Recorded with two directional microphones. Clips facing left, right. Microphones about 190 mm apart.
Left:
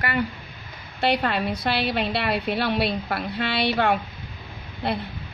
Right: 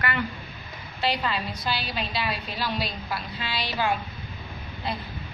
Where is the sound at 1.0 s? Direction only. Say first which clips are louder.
Left 5 dB; 60° left (ahead or behind).